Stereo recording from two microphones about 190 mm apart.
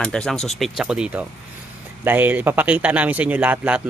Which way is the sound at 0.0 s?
5° left (ahead or behind).